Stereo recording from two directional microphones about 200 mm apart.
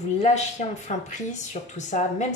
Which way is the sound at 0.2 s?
35° left (ahead or behind).